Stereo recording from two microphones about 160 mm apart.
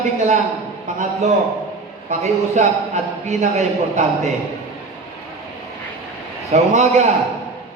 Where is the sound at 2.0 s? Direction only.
45° right (ahead or behind).